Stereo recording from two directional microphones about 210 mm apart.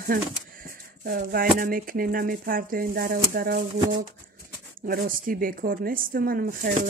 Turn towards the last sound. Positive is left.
turn(degrees=-40)  # may be behind; listen again after turning